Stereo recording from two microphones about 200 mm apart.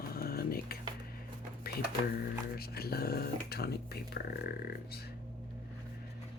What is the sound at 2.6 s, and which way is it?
Speech, 50° left (ahead or behind).